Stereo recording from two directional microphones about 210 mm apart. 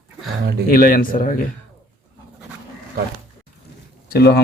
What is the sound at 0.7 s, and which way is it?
Speech, 45° left (ahead or behind).